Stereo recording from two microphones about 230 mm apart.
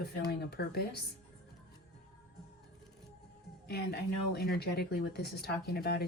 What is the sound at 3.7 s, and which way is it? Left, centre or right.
Speech, left.